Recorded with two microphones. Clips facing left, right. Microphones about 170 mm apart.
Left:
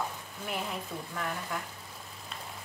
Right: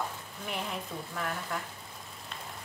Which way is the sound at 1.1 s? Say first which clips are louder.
Right 1 dB; centre (ahead or behind).